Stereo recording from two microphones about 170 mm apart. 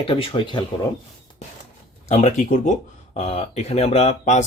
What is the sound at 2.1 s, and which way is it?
A man's voice, 40° left (ahead or behind).